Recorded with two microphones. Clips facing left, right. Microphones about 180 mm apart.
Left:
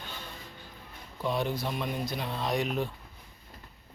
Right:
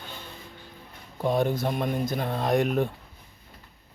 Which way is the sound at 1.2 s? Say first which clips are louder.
Right 6 dB; 50° right (ahead or behind).